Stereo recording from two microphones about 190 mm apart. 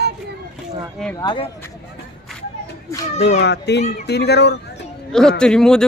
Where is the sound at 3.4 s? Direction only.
60° left (ahead or behind).